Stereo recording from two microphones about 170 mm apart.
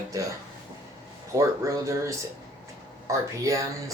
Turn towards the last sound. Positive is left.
turn(degrees=-20)  # may be behind; listen again after turning